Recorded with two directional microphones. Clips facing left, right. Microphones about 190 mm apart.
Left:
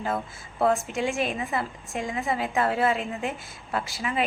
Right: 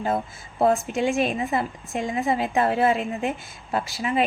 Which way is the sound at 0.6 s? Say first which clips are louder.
Right 3 dB; 25° right (ahead or behind).